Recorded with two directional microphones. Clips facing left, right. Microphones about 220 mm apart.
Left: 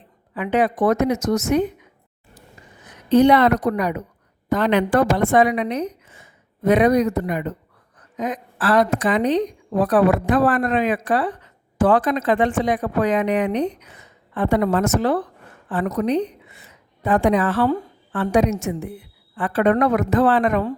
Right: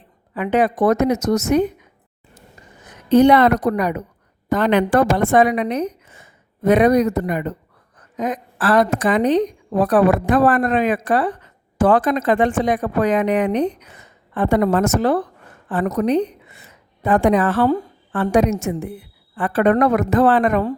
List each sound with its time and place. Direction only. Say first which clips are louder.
0.3 s a woman's voice: right 2 dB; 45° right (ahead or behind)
3.1 s a woman's voice: right 2 dB; 50° right (ahead or behind)